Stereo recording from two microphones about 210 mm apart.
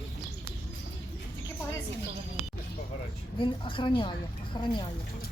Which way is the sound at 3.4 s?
25° left (ahead or behind).